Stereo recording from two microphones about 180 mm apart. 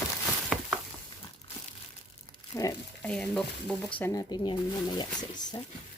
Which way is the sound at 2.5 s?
20° left (ahead or behind).